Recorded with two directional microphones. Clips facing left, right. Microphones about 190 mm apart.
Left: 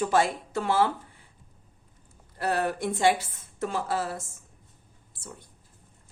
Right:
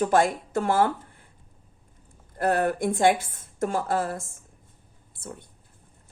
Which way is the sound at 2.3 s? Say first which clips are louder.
Right 4 dB; 50° right (ahead or behind).